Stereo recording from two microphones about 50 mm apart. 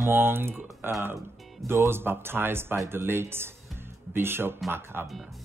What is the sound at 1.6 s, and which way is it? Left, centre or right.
Speech, right.